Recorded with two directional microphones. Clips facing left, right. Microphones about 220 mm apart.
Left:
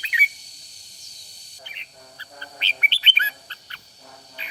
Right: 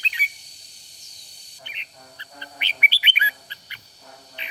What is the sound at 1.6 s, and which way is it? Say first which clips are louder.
Bird: even; 20° right (ahead or behind).